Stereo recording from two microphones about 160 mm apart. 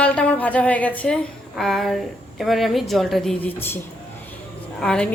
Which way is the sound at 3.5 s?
15° left (ahead or behind).